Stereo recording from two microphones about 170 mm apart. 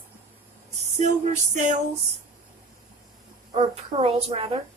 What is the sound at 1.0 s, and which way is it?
Music, 45° right (ahead or behind).